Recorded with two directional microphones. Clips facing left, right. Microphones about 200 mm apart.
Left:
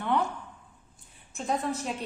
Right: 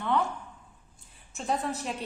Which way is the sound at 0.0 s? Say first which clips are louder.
Even; 10° left (ahead or behind).